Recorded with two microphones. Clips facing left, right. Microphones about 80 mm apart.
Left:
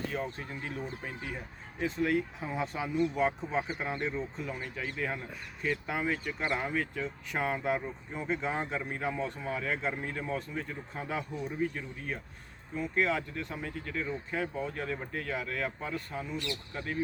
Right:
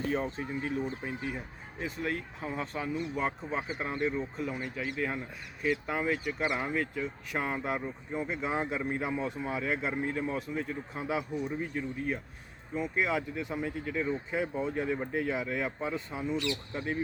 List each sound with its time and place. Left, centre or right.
0.1 s speech: right
0.4 s speech: centre